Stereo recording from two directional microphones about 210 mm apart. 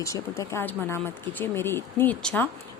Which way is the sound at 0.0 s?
15° left (ahead or behind).